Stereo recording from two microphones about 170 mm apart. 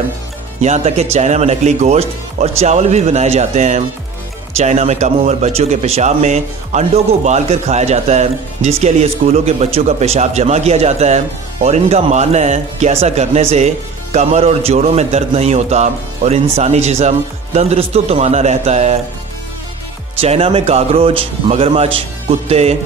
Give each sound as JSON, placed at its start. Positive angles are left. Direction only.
{"t": 0.6, "sound": "a man's voice", "side_deg": -45}
{"t": 20.2, "sound": "a man's voice", "side_deg": -35}